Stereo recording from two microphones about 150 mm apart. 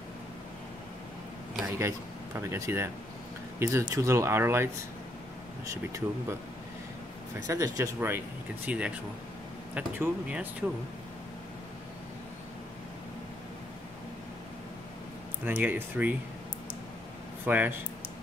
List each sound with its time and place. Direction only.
1.7 s speech: 20° right (ahead or behind)
5.9 s speech: 20° right (ahead or behind)
7.4 s speech: 20° right (ahead or behind)
15.4 s speech: 10° right (ahead or behind)
17.5 s speech: 10° right (ahead or behind)